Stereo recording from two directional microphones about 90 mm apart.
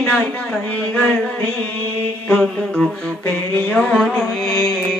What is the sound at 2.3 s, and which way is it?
Music, 20° left (ahead or behind).